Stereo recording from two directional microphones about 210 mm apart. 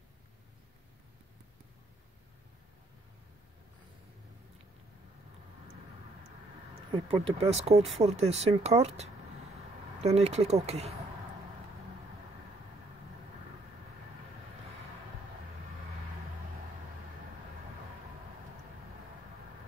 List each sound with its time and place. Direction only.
6.9 s speech: 25° right (ahead or behind)